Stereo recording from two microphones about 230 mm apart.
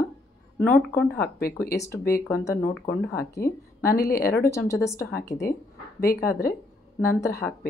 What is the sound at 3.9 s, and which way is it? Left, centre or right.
Speech, left.